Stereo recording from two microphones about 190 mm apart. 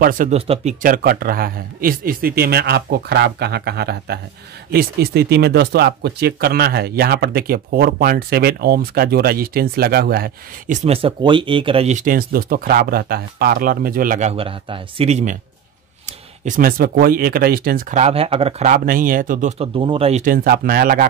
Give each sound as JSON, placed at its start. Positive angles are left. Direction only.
{"t": 0.0, "sound": "speech", "side_deg": -45}
{"t": 0.3, "sound": "speech", "side_deg": -35}
{"t": 0.8, "sound": "speech", "side_deg": -50}
{"t": 10.8, "sound": "speech", "side_deg": -30}
{"t": 14.3, "sound": "speech", "side_deg": -30}
{"t": 18.7, "sound": "speech", "side_deg": -45}
{"t": 19.6, "sound": "speech", "side_deg": -25}
{"t": 20.4, "sound": "speech", "side_deg": -50}